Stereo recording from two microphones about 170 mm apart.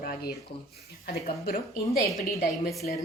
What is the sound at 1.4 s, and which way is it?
Speech, 65° left (ahead or behind).